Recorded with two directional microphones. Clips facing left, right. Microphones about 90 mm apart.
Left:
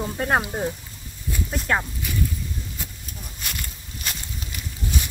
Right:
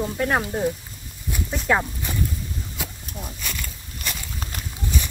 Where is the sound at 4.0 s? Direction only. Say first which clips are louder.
Right 1 dB; 50° right (ahead or behind).